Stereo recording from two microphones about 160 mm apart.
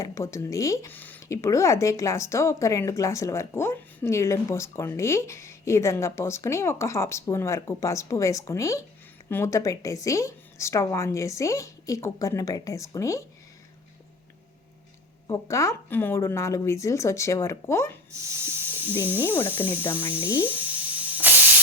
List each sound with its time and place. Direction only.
0.0 s a woman's voice: 20° left (ahead or behind)
15.3 s speech: 20° left (ahead or behind)
18.4 s speech: 15° right (ahead or behind)
19.2 s speech: 15° left (ahead or behind)
19.8 s speech: 35° left (ahead or behind)
20.4 s a sound: 10° right (ahead or behind)